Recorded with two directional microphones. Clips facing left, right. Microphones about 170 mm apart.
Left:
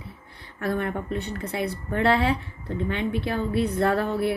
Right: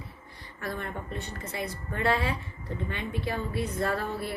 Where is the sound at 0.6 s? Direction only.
60° left (ahead or behind).